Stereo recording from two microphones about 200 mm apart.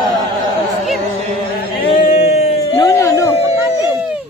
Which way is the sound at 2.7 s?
15° left (ahead or behind).